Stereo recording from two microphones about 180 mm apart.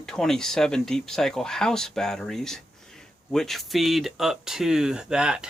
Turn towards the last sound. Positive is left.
turn(degrees=-5)  # may be behind; listen again after turning